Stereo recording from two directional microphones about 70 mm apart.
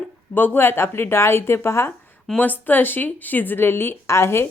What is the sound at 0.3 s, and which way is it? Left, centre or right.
Speech, left.